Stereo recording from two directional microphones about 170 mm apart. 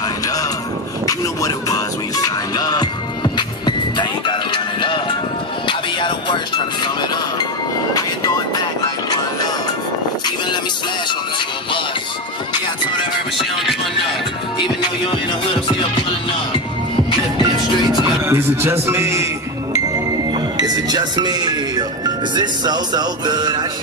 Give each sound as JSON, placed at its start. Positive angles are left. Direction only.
{"t": 1.0, "sound": "vehicle", "side_deg": 20}
{"t": 2.2, "sound": "music", "side_deg": 25}
{"t": 18.2, "sound": "speech", "side_deg": -15}
{"t": 20.5, "sound": "speech", "side_deg": -25}